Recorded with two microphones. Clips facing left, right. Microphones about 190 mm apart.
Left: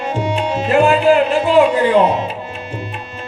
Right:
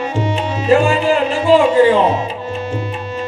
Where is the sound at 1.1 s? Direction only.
60° left (ahead or behind).